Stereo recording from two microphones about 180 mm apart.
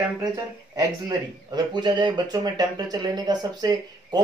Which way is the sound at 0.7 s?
20° right (ahead or behind).